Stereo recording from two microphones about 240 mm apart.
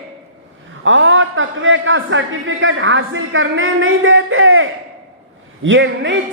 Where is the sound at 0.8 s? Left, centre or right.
Right.